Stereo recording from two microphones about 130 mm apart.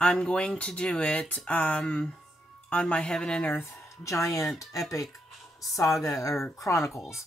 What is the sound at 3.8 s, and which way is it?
Speech, 25° left (ahead or behind).